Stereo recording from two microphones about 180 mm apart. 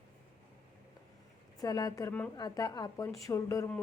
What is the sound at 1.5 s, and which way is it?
A woman's voice, 20° left (ahead or behind).